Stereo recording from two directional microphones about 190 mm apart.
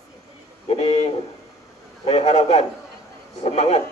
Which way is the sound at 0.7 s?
30° left (ahead or behind).